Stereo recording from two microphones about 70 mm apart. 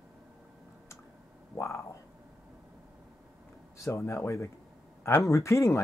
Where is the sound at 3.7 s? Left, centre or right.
Left.